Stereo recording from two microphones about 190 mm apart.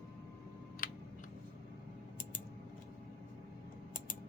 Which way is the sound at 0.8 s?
45° left (ahead or behind).